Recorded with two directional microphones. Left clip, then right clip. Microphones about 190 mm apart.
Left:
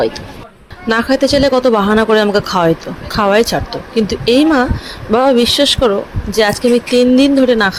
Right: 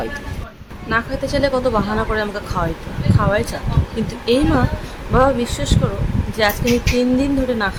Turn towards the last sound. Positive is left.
turn(degrees=25)  # may be behind; listen again after turning